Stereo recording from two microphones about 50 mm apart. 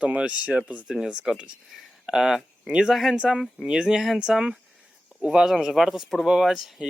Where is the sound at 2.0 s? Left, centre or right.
Centre.